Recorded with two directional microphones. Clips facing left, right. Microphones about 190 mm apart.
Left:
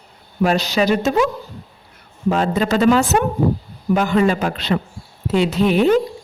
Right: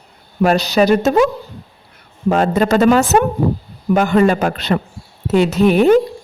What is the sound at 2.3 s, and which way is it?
A woman's voice, 50° right (ahead or behind).